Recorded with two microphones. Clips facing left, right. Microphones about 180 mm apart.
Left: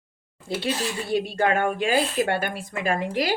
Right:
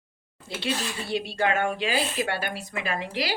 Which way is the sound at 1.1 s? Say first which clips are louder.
Left 3 dB; 50° left (ahead or behind).